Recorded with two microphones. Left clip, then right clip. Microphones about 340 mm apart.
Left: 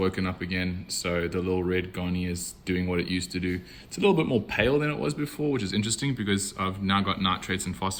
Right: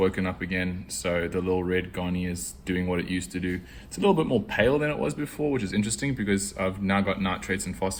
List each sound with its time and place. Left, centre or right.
0.0 s speech: centre